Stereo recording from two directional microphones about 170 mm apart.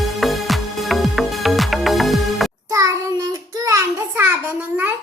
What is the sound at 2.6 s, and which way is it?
Child singing, 20° right (ahead or behind).